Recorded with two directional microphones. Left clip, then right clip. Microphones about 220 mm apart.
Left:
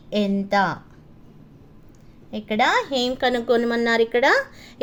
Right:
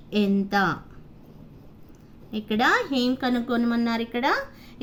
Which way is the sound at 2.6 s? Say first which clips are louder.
Left 2 dB; 25° left (ahead or behind).